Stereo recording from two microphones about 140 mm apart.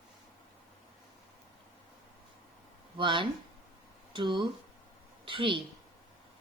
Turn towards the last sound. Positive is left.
turn(degrees=-40)  # may be behind; listen again after turning